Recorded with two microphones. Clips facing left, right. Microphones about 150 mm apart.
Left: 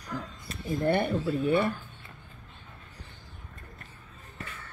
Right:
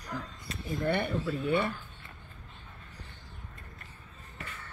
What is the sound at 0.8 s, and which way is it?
Speech, 40° left (ahead or behind).